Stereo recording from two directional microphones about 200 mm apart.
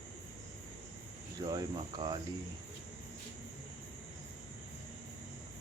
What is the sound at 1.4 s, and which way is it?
Speech, 20° right (ahead or behind).